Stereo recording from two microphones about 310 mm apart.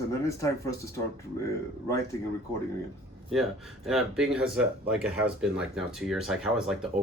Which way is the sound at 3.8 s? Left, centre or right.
Centre.